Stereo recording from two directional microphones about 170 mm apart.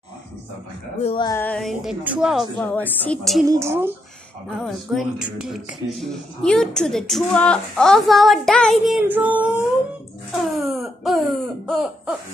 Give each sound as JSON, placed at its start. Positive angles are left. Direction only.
{"t": 1.0, "sound": "music", "side_deg": 30}
{"t": 1.3, "sound": "speech", "side_deg": 10}
{"t": 3.4, "sound": "speech", "side_deg": -15}
{"t": 4.6, "sound": "speech", "side_deg": 0}
{"t": 9.0, "sound": "speech", "side_deg": -10}